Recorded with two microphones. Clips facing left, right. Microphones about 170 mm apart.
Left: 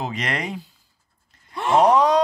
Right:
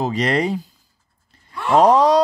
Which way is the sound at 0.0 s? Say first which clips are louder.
Right 8 dB; 35° right (ahead or behind).